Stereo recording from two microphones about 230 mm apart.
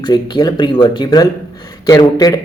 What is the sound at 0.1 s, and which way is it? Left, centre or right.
Speech, centre.